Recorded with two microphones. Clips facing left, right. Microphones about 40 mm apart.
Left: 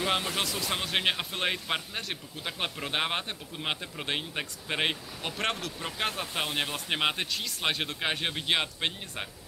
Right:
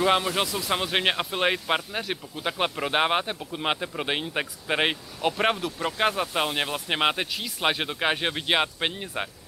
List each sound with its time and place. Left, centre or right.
0.0 s speech: centre